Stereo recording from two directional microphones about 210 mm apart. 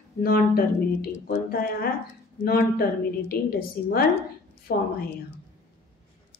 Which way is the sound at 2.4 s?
45° left (ahead or behind).